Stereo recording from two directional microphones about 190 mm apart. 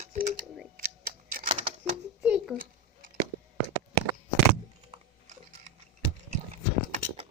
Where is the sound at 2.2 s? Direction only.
5° right (ahead or behind).